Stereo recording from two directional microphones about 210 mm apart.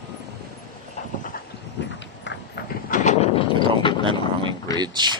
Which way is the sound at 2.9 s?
35° left (ahead or behind).